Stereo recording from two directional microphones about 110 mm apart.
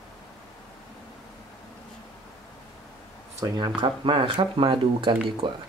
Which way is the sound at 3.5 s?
40° right (ahead or behind).